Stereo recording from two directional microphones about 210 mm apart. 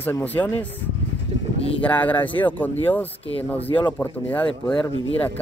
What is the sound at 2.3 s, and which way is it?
Speech, 10° left (ahead or behind).